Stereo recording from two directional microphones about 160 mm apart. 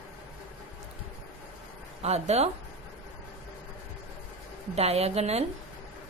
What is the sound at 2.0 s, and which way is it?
Speech, 40° right (ahead or behind).